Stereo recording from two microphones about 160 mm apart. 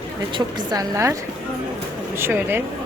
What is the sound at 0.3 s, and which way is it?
Speech, 25° right (ahead or behind).